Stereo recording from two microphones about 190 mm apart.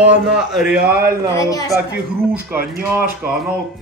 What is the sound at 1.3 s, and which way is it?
Speech, 15° left (ahead or behind).